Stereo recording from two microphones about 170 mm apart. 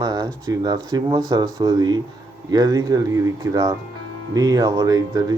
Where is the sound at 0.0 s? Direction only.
25° right (ahead or behind).